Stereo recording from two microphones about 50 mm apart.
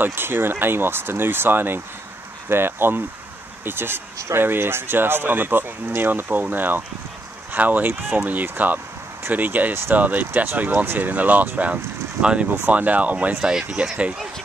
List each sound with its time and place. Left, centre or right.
0.0 s speech: right
13.4 s speech: centre